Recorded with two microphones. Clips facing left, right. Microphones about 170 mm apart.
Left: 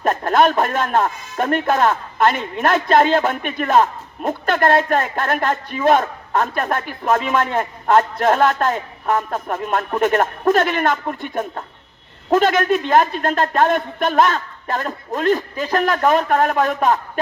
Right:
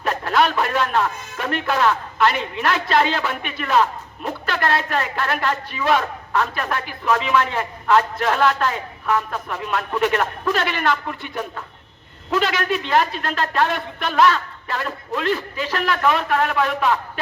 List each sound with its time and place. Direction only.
0.0 s speech: 50° left (ahead or behind)